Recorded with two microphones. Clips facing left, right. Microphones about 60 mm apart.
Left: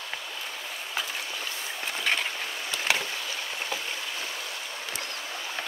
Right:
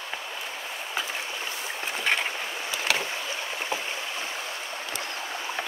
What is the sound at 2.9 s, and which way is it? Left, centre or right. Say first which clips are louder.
Rowboat: right 2 dB; right.